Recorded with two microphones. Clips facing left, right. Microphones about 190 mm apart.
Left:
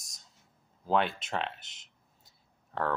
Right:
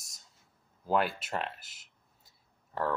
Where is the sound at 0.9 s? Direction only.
5° right (ahead or behind).